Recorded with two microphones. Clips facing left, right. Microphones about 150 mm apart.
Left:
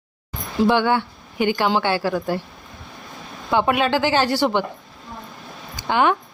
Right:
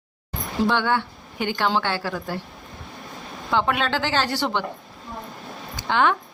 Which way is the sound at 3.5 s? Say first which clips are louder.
Left 4 dB; 10° left (ahead or behind).